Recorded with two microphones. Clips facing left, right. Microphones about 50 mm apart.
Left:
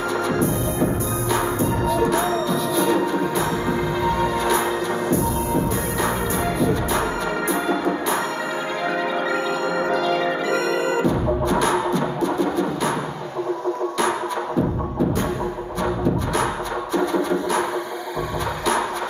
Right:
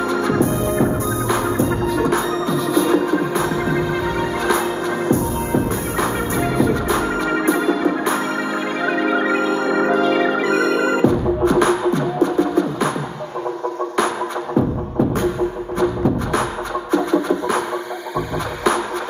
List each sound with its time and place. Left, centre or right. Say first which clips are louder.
0.3 s music: right 4 dB; right
6.6 s music: right 4 dB; right
9.0 s music: right 5 dB; right